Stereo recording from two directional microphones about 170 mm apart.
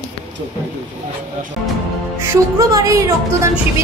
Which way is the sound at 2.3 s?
20° right (ahead or behind).